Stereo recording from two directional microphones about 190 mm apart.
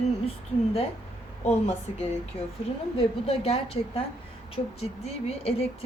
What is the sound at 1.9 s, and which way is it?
Speech, 30° left (ahead or behind).